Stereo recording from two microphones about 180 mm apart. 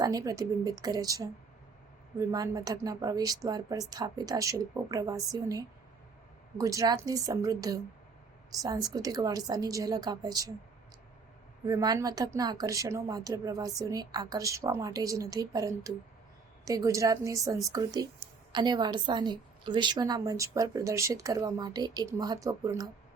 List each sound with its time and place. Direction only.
0.0 s a woman's voice: 20° right (ahead or behind)
11.6 s a woman's voice: 20° right (ahead or behind)